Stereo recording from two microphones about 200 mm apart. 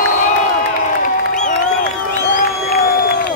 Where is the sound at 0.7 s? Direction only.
40° left (ahead or behind).